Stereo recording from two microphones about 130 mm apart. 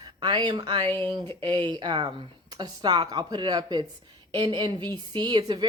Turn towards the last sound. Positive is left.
turn(degrees=-35)  # may be behind; listen again after turning